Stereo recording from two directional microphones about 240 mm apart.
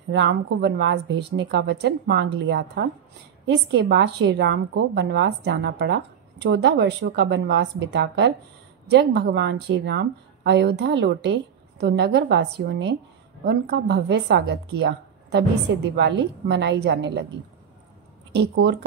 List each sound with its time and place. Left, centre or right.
0.1 s a woman's voice: right
18.3 s a woman's voice: right